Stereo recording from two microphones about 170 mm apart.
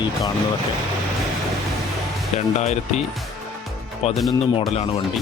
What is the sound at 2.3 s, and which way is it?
Speech, 40° left (ahead or behind).